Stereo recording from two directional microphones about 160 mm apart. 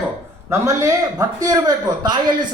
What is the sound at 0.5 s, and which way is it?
A man's voice, 15° right (ahead or behind).